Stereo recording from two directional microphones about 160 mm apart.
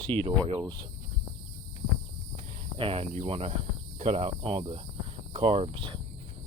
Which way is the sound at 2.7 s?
35° right (ahead or behind).